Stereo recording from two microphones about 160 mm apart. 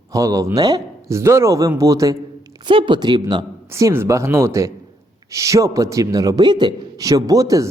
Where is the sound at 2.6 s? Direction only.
30° right (ahead or behind).